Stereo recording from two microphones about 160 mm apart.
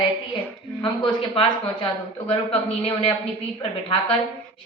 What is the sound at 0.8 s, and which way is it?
A woman's voice, 35° left (ahead or behind).